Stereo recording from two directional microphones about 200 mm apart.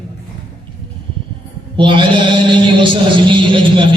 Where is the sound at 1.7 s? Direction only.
25° right (ahead or behind).